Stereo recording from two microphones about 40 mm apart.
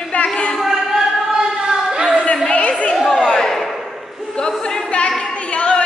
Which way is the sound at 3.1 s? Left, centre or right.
Centre.